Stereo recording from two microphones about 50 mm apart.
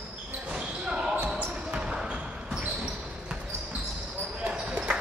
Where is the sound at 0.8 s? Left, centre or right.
Centre.